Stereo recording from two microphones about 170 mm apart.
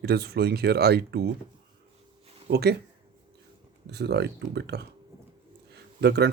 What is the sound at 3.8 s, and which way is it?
Speech, 75° right (ahead or behind).